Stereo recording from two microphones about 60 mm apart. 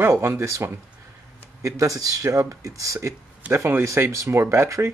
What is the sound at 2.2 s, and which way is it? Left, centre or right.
Speech, right.